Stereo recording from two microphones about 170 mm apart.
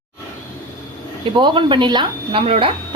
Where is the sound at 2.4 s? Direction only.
40° right (ahead or behind).